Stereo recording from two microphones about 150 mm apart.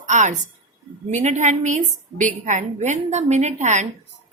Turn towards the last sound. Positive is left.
turn(degrees=-50)  # may be behind; listen again after turning